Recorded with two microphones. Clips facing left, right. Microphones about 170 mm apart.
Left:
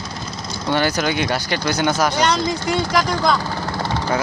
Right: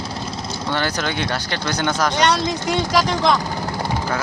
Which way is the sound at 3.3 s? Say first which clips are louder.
Even; 15° right (ahead or behind).